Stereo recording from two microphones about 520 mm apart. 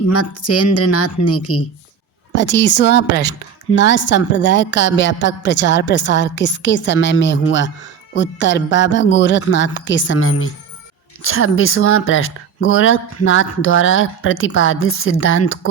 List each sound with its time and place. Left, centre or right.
0.1 s a woman's voice: left